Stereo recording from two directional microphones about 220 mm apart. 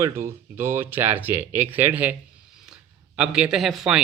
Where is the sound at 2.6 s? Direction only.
5° right (ahead or behind).